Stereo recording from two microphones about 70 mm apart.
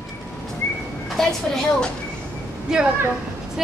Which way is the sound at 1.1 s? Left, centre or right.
Centre.